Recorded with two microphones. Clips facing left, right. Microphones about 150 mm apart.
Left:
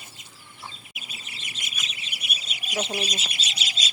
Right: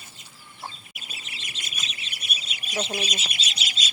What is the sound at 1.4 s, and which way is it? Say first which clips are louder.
Bird: left 1 dB; 25° left (ahead or behind).